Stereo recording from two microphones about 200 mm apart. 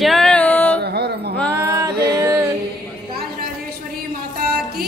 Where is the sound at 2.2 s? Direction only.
10° right (ahead or behind).